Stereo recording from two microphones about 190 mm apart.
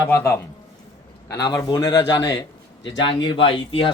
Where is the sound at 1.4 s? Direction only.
20° left (ahead or behind).